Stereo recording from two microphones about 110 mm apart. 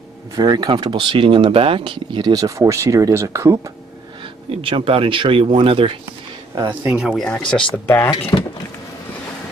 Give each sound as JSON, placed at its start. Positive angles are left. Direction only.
{"t": 0.4, "sound": "speech", "side_deg": -40}
{"t": 4.2, "sound": "speech", "side_deg": -55}
{"t": 6.8, "sound": "speech", "side_deg": -10}
{"t": 7.2, "sound": "speech", "side_deg": 10}
{"t": 7.8, "sound": "speech", "side_deg": 20}